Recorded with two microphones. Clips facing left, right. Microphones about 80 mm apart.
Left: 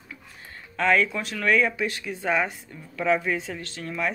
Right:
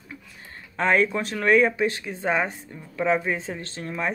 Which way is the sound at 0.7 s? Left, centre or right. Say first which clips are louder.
Right 1 dB; right.